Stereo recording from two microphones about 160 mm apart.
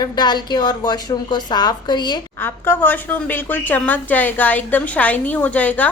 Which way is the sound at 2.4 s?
15° left (ahead or behind).